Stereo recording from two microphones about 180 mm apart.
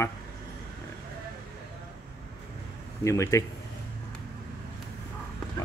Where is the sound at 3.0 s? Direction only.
15° left (ahead or behind).